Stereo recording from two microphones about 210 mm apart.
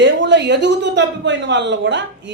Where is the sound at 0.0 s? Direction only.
55° right (ahead or behind).